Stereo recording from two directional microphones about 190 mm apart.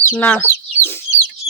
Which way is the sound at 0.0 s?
10° left (ahead or behind).